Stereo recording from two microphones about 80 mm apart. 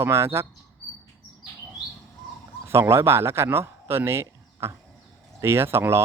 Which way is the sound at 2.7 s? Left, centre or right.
Right.